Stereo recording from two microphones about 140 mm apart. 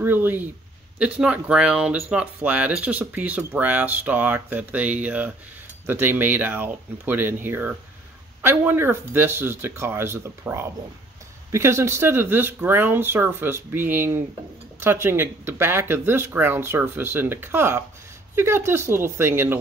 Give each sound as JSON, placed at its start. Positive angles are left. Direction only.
{"t": 0.0, "sound": "speech", "side_deg": -15}